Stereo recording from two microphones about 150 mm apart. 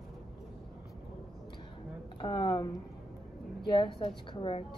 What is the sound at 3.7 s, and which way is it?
Speech, 35° left (ahead or behind).